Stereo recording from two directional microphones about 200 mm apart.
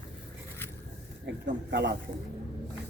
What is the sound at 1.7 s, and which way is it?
Speech, 60° right (ahead or behind).